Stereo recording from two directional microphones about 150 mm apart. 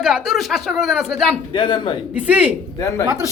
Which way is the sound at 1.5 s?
35° left (ahead or behind).